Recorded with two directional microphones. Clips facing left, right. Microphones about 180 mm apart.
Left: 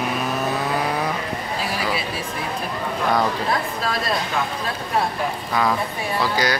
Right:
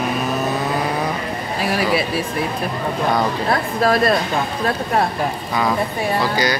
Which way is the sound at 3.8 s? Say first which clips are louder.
Right 9 dB; 65° right (ahead or behind).